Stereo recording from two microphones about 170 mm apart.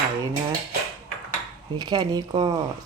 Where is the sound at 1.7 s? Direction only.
25° right (ahead or behind).